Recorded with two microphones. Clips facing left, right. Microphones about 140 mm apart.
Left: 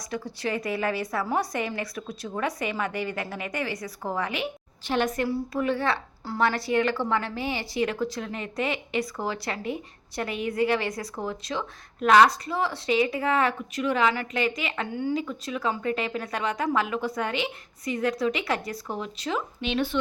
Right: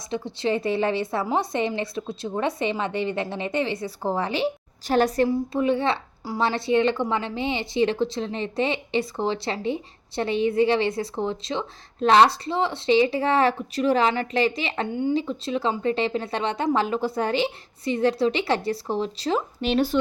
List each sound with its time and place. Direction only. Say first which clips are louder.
0.1 s a woman's voice: right 5 dB; 25° right (ahead or behind)
5.3 s a woman's voice: right 4 dB; 20° right (ahead or behind); by 20.0 s 40° right (ahead or behind)